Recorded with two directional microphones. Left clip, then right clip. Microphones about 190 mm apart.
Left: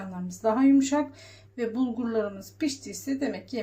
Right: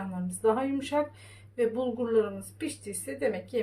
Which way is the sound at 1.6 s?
30° left (ahead or behind).